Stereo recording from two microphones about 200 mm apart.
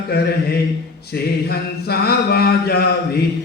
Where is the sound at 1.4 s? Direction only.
50° left (ahead or behind).